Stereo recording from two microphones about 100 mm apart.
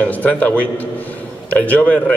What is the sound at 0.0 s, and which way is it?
A man's voice, 15° left (ahead or behind).